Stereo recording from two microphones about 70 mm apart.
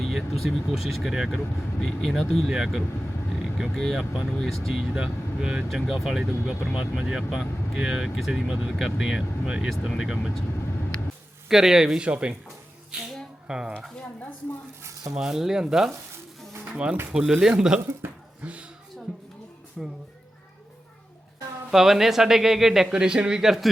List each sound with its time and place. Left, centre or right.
0.0 s speech: centre
3.8 s speech: centre
11.4 s speech: centre
12.0 s a woman's voice: centre
15.1 s speech: centre
16.7 s speech: centre
17.7 s speech: right
19.8 s speech: centre
21.7 s speech: centre